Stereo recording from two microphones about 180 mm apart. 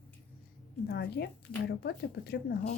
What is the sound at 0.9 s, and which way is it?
Speech, 65° left (ahead or behind).